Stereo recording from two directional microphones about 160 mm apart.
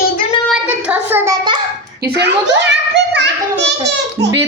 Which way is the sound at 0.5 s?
10° right (ahead or behind).